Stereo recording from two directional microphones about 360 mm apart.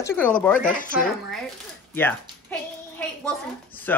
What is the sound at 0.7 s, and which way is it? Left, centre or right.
Speech, left.